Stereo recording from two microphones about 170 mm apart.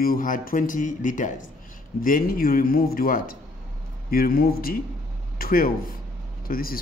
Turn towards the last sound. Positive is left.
turn(degrees=60)  # may be behind; listen again after turning